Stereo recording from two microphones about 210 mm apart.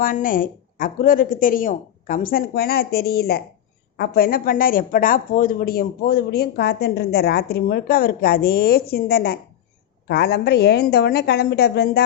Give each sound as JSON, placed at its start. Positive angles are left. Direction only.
{"t": 0.0, "sound": "speech", "side_deg": 40}